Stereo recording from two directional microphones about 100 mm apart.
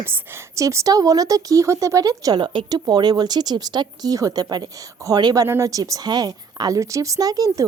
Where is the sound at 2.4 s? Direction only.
55° right (ahead or behind).